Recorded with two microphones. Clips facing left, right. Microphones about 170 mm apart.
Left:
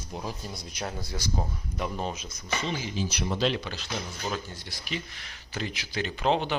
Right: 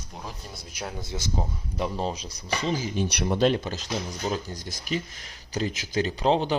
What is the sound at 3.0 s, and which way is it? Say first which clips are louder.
Speech: right 4 dB; 70° right (ahead or behind).